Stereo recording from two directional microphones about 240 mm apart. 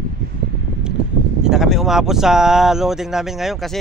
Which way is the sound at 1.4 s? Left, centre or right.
Centre.